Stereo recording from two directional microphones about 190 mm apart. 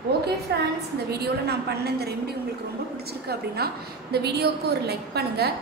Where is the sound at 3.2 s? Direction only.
55° right (ahead or behind).